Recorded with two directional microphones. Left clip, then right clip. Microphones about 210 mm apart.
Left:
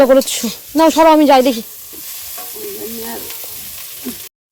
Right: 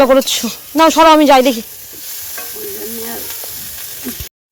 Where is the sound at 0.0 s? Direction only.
10° left (ahead or behind).